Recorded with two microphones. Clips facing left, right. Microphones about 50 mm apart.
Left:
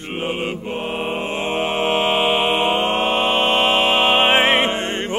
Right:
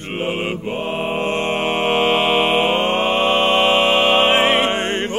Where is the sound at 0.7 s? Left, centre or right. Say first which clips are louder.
Right 2 dB; centre; by 4.6 s left.